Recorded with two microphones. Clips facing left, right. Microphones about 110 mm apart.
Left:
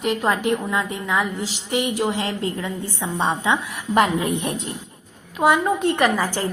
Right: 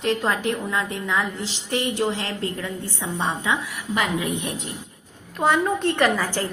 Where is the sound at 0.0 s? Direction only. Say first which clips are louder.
Left 2 dB; 15° left (ahead or behind).